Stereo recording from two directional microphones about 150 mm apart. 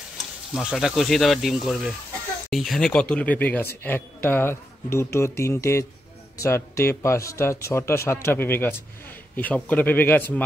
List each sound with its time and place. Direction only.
0.6 s speech: centre (ahead or behind); by 10.4 s 15° left (ahead or behind)